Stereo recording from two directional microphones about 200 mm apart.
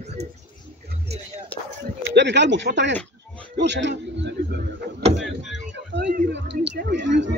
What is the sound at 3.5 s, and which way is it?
Music, 60° right (ahead or behind).